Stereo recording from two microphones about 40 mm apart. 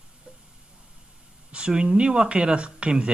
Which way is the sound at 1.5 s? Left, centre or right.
Right.